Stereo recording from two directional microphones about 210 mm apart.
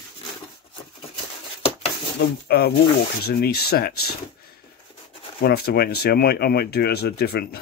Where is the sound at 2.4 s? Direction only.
50° left (ahead or behind).